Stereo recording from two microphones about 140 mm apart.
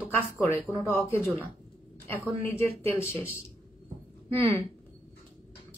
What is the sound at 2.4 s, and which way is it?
Speech, 15° left (ahead or behind).